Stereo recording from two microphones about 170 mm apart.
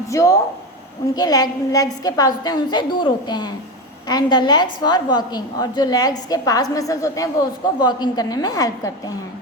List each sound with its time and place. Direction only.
0.1 s a woman's voice: 20° left (ahead or behind)